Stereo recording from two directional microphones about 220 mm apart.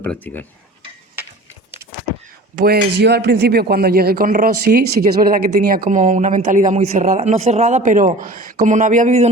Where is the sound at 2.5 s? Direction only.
40° right (ahead or behind).